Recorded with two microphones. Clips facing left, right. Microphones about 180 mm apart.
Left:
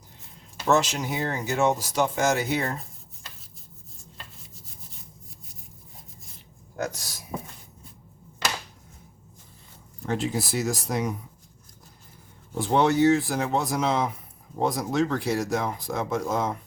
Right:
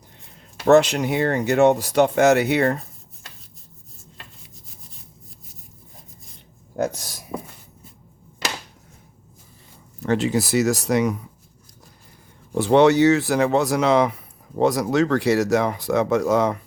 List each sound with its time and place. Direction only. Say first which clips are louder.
0.6 s speech: right 8 dB; 60° right (ahead or behind)
6.7 s a sound: right 7 dB; 55° right (ahead or behind)
10.0 s speech: right 7 dB; 75° right (ahead or behind)
12.5 s speech: right 7 dB; 75° right (ahead or behind)